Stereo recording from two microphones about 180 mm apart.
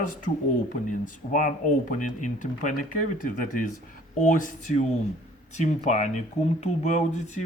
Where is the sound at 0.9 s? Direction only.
45° left (ahead or behind).